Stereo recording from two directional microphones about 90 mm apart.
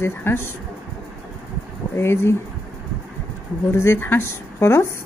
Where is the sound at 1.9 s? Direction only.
30° left (ahead or behind).